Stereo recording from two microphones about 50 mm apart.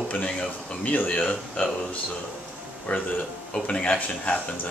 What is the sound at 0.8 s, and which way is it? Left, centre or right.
A man's voice, left.